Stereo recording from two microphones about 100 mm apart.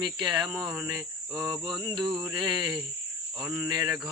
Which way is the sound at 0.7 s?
30° right (ahead or behind).